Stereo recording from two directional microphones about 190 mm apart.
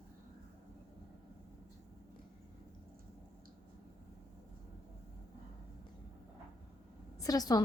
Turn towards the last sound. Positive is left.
turn(degrees=20)  # may be behind; listen again after turning